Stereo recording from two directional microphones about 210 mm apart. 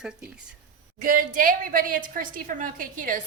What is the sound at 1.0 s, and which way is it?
A woman's voice, 40° right (ahead or behind).